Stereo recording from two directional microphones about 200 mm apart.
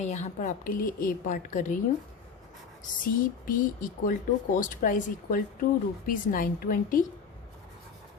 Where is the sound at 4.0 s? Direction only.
40° left (ahead or behind).